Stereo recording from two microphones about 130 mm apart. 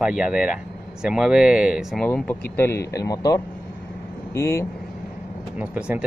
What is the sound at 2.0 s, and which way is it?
Speech, 10° left (ahead or behind).